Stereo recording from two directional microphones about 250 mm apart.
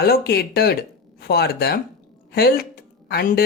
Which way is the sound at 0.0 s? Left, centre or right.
Left.